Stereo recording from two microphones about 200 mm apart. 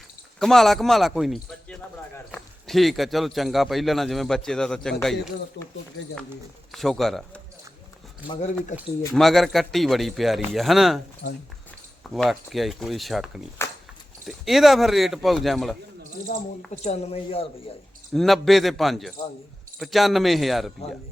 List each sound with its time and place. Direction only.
0.3 s speech: centre (ahead or behind)
5.6 s speech: 60° left (ahead or behind)
6.7 s speech: centre (ahead or behind)
8.3 s speech: 35° left (ahead or behind)
8.7 s speech: centre (ahead or behind)
11.2 s speech: 60° left (ahead or behind)
12.1 s speech: centre (ahead or behind)
13.6 s a sound: 10° left (ahead or behind)
14.3 s speech: centre (ahead or behind)
16.3 s speech: 45° left (ahead or behind)
16.8 s speech: 30° left (ahead or behind)
18.1 s speech: centre (ahead or behind)